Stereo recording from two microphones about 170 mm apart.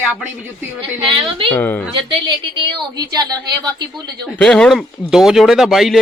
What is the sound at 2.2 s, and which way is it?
A woman's voice, 25° right (ahead or behind).